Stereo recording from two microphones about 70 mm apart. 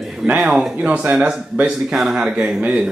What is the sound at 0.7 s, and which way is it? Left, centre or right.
A man's voice, centre.